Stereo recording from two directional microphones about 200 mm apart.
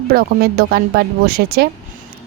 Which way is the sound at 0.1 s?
50° right (ahead or behind).